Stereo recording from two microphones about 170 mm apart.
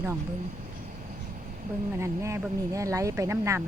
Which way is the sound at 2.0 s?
15° right (ahead or behind).